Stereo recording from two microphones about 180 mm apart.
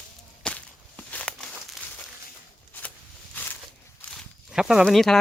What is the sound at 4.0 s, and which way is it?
Walk, 5° left (ahead or behind).